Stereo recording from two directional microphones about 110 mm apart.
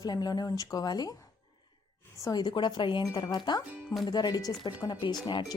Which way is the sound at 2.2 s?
40° left (ahead or behind).